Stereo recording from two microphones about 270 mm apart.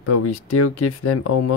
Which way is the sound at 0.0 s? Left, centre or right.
Left.